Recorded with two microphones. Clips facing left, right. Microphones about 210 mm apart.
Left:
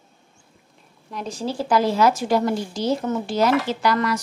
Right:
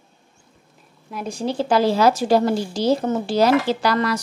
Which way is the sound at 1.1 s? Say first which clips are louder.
Right 2 dB; 10° right (ahead or behind).